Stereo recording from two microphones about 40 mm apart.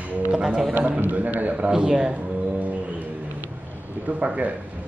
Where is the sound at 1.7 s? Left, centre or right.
Centre.